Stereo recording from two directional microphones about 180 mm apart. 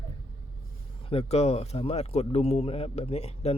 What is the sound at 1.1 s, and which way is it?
Speech, 35° left (ahead or behind).